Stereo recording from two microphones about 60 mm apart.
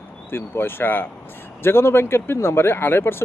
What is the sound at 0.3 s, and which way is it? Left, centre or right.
Speech, left.